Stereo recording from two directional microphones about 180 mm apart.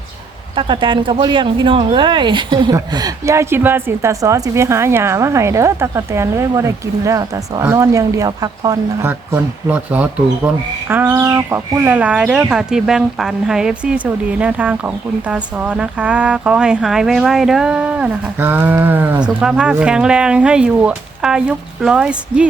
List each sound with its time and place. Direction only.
0.5 s speech: 25° right (ahead or behind); by 22.4 s 5° right (ahead or behind)